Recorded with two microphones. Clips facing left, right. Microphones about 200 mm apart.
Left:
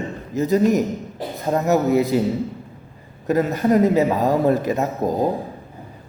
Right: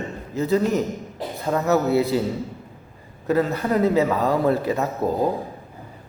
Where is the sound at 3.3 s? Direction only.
15° left (ahead or behind).